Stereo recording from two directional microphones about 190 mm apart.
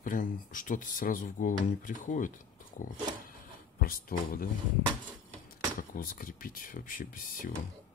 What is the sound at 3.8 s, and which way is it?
Speech, 50° left (ahead or behind).